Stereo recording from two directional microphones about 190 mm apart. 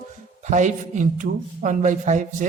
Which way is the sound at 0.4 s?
40° right (ahead or behind).